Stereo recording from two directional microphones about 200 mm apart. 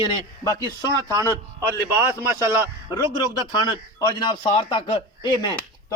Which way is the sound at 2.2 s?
10° right (ahead or behind).